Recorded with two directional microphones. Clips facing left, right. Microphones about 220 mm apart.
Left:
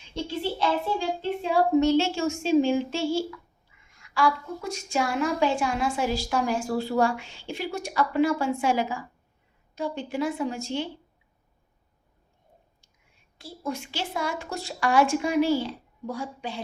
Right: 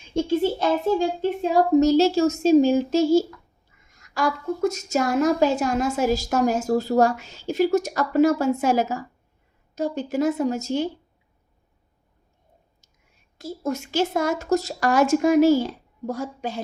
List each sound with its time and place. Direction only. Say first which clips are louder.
0.1 s speech: right 9 dB; 50° right (ahead or behind)
13.4 s speech: right 5 dB; 45° right (ahead or behind)